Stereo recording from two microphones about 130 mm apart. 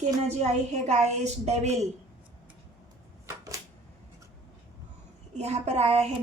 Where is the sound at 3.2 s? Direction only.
25° right (ahead or behind).